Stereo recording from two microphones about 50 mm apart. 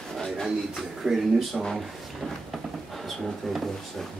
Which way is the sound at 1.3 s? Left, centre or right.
Centre.